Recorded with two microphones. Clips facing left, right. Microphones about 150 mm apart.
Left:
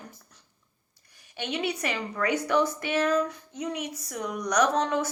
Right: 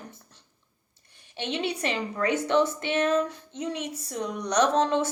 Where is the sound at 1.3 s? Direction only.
25° right (ahead or behind).